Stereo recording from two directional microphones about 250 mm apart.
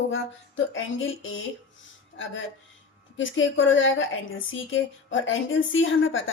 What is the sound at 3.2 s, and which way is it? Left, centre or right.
A woman's voice, left.